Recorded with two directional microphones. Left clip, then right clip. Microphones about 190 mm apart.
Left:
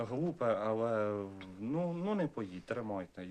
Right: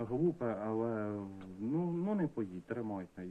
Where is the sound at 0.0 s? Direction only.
35° left (ahead or behind).